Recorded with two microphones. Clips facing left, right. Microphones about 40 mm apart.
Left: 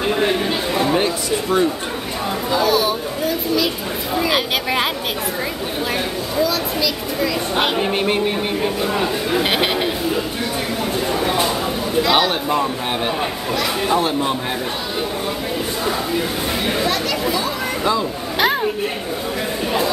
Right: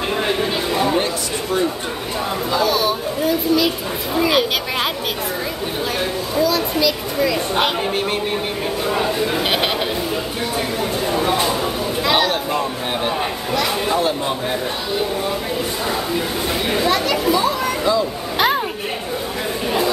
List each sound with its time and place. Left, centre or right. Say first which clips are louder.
0.2 s a sound: left 1 dB; centre
2.5 s speech: left 1 dB; centre
6.3 s speech: right 2 dB; centre
8.9 s speech: even; centre
11.1 s speech: right 1 dB; centre
16.2 s speech: even; centre
18.4 s a sound: even; centre